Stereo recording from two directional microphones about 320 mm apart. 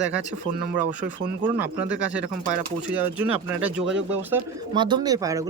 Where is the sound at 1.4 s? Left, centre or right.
Centre.